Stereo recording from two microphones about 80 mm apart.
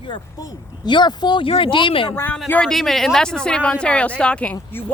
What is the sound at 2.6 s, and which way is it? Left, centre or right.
Speech, centre.